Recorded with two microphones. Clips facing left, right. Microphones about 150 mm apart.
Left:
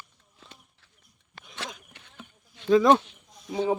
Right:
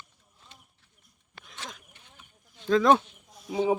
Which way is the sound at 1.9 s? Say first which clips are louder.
Left 8 dB; 75° left (ahead or behind).